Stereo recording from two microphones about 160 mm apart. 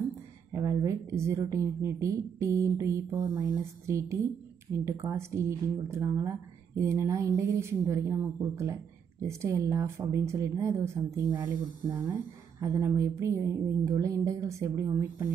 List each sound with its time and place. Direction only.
0.5 s speech: 20° right (ahead or behind)